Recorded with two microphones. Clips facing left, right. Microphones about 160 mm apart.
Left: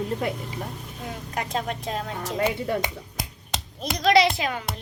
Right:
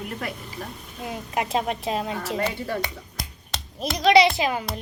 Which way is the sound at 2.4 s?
20° left (ahead or behind).